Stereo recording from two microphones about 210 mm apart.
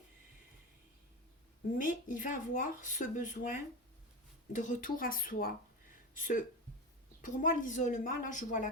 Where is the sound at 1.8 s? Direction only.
40° left (ahead or behind).